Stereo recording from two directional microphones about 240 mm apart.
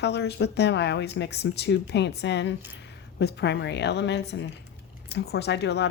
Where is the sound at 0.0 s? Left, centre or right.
Left.